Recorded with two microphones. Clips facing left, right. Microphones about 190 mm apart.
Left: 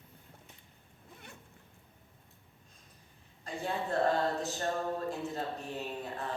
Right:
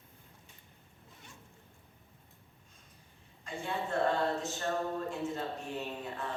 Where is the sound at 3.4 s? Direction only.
35° left (ahead or behind).